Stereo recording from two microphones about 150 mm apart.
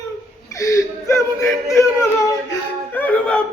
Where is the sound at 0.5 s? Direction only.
20° left (ahead or behind).